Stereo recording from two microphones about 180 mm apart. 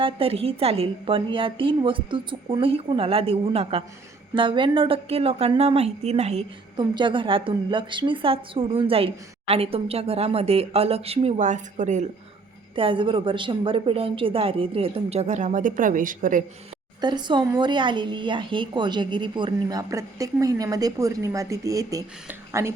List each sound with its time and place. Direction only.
0.0 s a woman's voice: 30° right (ahead or behind)
6.7 s a woman's voice: 25° right (ahead or behind); by 12.0 s 40° right (ahead or behind)
12.7 s a woman's voice: 30° right (ahead or behind); by 16.4 s 45° right (ahead or behind)
17.0 s speech: 25° right (ahead or behind)